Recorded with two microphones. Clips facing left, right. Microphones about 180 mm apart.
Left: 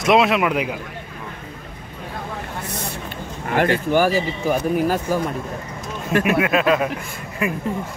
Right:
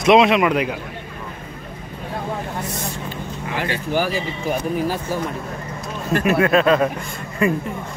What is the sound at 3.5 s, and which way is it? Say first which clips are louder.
Speech: left 5 dB; 55° left (ahead or behind).